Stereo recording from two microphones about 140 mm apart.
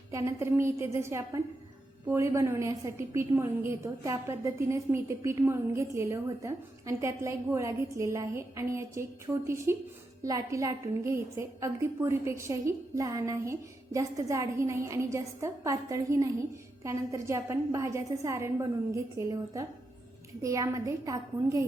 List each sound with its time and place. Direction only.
0.1 s a woman's voice: 20° right (ahead or behind)